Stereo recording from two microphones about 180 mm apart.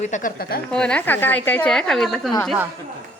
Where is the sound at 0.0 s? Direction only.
45° left (ahead or behind).